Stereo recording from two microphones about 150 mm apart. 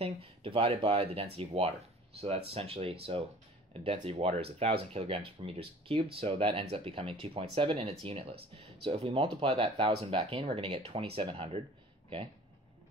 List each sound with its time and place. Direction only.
0.0 s speech: 40° right (ahead or behind)